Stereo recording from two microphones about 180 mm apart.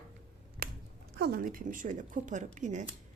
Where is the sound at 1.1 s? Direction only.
65° right (ahead or behind).